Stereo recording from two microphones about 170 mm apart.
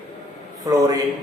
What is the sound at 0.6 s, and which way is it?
Speech, 20° right (ahead or behind).